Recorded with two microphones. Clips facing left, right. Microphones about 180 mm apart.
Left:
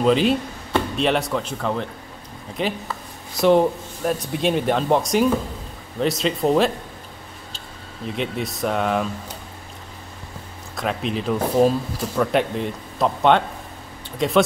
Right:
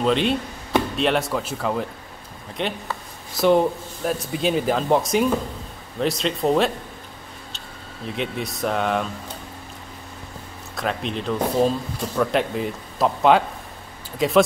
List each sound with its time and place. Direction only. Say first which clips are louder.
0.0 s speech: left 3 dB; centre (ahead or behind)
8.2 s speech: left 1 dB; centre (ahead or behind)
10.8 s speech: left 1 dB; centre (ahead or behind)